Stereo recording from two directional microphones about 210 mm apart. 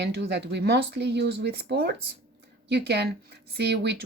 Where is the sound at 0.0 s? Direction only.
55° right (ahead or behind).